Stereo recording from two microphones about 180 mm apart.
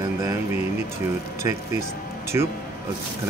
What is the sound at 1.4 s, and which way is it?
Speech, 15° right (ahead or behind).